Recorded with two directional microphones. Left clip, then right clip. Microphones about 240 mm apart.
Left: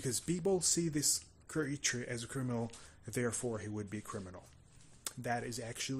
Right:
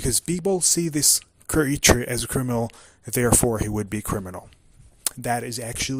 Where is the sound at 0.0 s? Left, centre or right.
Right.